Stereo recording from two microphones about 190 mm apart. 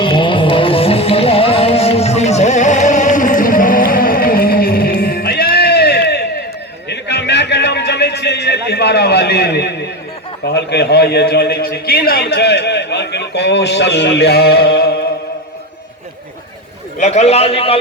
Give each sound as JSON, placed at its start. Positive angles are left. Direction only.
{"t": 0.0, "sound": "music", "side_deg": 25}
{"t": 6.8, "sound": "a sound", "side_deg": 65}
{"t": 10.4, "sound": "a man's voice", "side_deg": 60}
{"t": 17.0, "sound": "a man's voice", "side_deg": 35}